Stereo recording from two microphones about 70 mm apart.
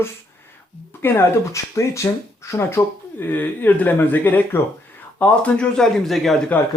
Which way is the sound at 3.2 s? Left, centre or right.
Left.